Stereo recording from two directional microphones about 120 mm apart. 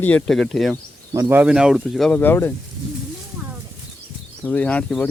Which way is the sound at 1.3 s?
15° right (ahead or behind).